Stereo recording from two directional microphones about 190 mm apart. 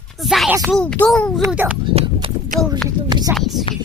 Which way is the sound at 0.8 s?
5° left (ahead or behind).